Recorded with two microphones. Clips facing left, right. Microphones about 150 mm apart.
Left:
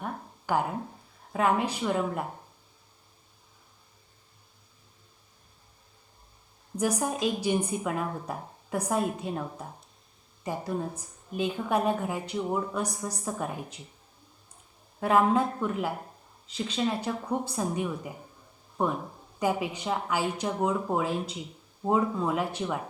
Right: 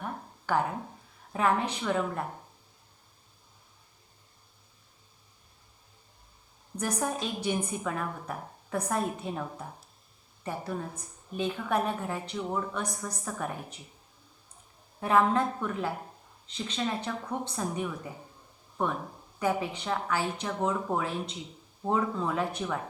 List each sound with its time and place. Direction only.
0.0 s a sound: 10° left (ahead or behind)
1.3 s a woman's voice: 10° left (ahead or behind)
6.7 s a woman's voice: 10° left (ahead or behind)
15.0 s a woman's voice: 10° left (ahead or behind)
19.4 s a woman's voice: 10° left (ahead or behind)